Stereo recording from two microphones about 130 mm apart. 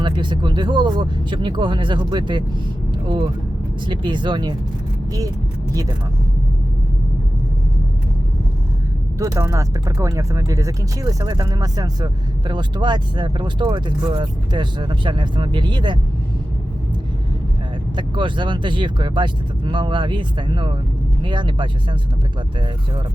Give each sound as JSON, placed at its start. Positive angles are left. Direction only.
{"t": 0.0, "sound": "speech", "side_deg": -35}
{"t": 3.8, "sound": "speech", "side_deg": -40}
{"t": 5.7, "sound": "speech", "side_deg": -30}
{"t": 9.1, "sound": "speech", "side_deg": -25}
{"t": 17.9, "sound": "speech", "side_deg": -40}